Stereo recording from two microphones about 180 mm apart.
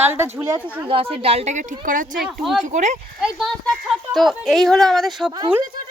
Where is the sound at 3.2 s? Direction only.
Centre (ahead or behind).